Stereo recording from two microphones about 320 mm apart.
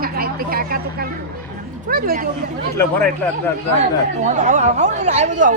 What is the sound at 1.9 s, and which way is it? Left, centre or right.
Speech, right.